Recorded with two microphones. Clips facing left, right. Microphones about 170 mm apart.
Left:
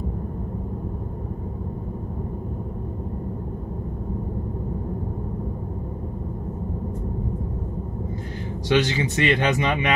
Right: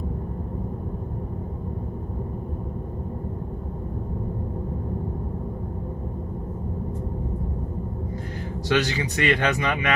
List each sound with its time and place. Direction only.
8.6 s speech: 20° left (ahead or behind)